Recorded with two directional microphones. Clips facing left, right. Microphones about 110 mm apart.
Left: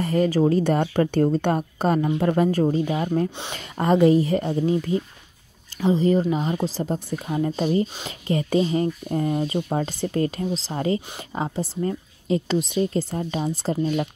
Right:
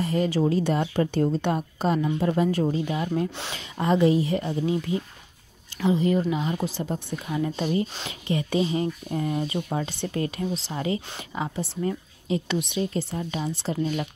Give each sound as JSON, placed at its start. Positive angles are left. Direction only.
{"t": 0.0, "sound": "speech", "side_deg": 45}
{"t": 3.3, "sound": "speech", "side_deg": 20}
{"t": 3.5, "sound": "speech", "side_deg": 45}